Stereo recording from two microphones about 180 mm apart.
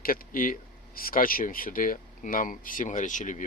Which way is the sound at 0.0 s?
50° left (ahead or behind).